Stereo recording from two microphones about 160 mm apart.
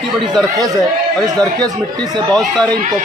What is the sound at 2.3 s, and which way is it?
Speech, 5° left (ahead or behind).